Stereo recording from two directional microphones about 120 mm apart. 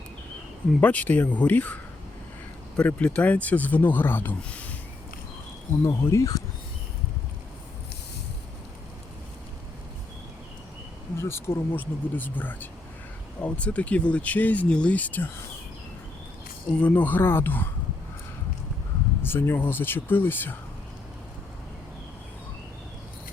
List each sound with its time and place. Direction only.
0.8 s speech: 15° left (ahead or behind)
5.8 s speech: 20° left (ahead or behind)
11.2 s speech: 20° left (ahead or behind)
16.7 s speech: 10° left (ahead or behind)
19.2 s speech: 20° left (ahead or behind)